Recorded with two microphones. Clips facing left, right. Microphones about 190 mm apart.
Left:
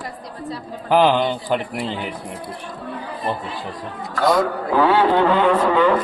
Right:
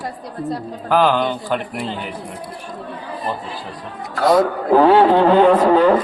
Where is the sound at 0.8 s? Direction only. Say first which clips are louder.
Even; 15° left (ahead or behind).